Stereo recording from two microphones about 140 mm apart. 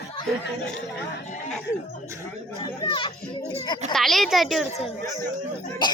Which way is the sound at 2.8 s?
35° left (ahead or behind).